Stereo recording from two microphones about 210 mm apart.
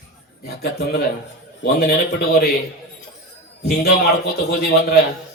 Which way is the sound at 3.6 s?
45° left (ahead or behind).